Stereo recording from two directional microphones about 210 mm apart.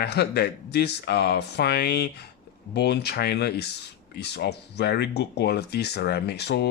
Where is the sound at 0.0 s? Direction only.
50° left (ahead or behind).